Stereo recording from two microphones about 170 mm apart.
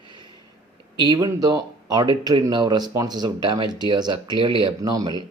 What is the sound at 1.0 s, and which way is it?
Speech, 25° right (ahead or behind).